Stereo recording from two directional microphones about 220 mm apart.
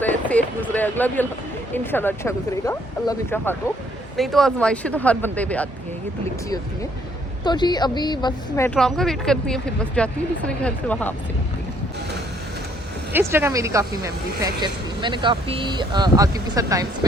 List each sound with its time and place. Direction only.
0.0 s speech: 5° left (ahead or behind)
7.4 s a woman's voice: 20° left (ahead or behind)
13.1 s speech: 10° right (ahead or behind)